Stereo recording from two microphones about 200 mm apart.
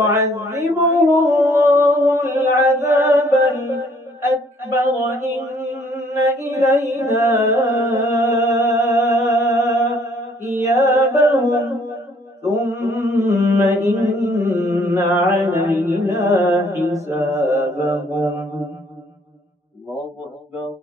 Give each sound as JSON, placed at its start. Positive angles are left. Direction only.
{"t": 0.0, "sound": "a sound", "side_deg": -15}
{"t": 15.7, "sound": "music", "side_deg": -15}
{"t": 16.8, "sound": "mantra", "side_deg": -15}